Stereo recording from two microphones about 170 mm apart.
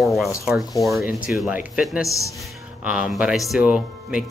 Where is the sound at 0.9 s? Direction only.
15° right (ahead or behind).